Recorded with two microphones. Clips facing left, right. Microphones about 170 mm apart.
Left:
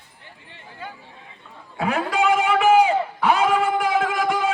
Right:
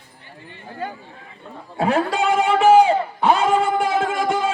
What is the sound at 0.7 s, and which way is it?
Chatter, 45° right (ahead or behind).